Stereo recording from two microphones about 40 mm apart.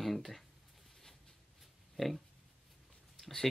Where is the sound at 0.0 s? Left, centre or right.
Centre.